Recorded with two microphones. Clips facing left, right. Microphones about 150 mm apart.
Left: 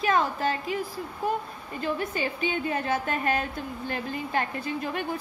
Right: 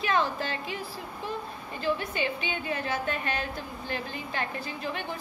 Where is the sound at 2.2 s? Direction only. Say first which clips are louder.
Left 3 dB; 40° left (ahead or behind).